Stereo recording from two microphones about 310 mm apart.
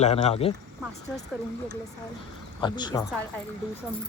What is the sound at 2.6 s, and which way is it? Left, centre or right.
Speech, centre.